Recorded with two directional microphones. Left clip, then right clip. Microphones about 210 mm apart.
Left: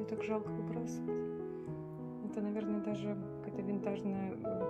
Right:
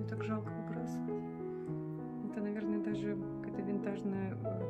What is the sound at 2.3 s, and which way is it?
Speech, centre (ahead or behind).